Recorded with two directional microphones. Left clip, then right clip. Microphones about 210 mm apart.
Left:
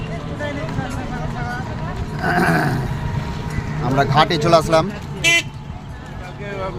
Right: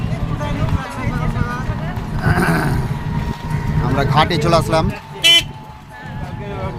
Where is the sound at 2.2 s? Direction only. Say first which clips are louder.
Left 1 dB; centre (ahead or behind).